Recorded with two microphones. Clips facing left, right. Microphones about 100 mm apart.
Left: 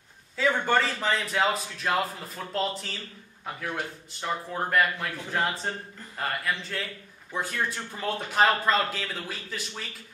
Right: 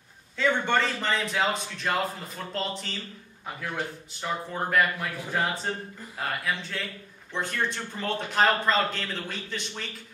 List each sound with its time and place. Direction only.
0.4 s a man's voice: 5° left (ahead or behind)
4.1 s a man's voice: centre (ahead or behind)